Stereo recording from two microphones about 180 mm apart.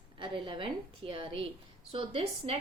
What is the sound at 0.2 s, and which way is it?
A woman's voice, 30° right (ahead or behind).